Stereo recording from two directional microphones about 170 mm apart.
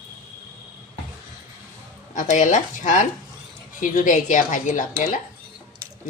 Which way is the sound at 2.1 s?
45° left (ahead or behind).